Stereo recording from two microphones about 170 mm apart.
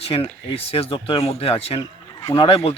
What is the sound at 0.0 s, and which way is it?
Speech, 35° left (ahead or behind).